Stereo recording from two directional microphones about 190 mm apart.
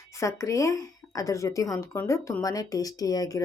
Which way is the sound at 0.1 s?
15° left (ahead or behind).